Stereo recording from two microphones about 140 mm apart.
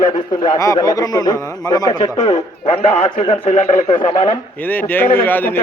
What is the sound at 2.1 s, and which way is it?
A man's voice, 55° left (ahead or behind).